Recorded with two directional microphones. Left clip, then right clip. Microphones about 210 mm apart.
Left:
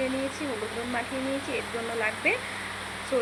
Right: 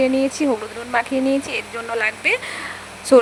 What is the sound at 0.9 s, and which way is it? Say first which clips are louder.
Speech: right 15 dB; 50° right (ahead or behind).